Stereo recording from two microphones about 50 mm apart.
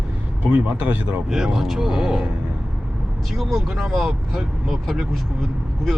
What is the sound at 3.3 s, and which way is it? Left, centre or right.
Speech, centre.